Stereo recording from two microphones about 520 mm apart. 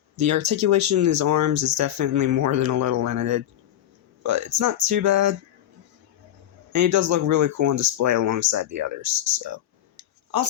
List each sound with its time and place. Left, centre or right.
0.2 s speech: right
6.7 s speech: right